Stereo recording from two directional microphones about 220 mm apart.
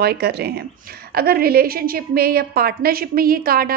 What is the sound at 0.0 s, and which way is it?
A woman's voice, 45° right (ahead or behind).